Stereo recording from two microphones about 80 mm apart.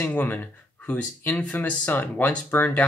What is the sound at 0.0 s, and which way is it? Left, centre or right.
Speech, left.